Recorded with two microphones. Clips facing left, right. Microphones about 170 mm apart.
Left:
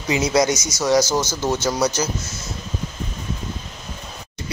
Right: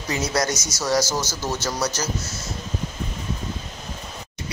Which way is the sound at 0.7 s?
5° right (ahead or behind).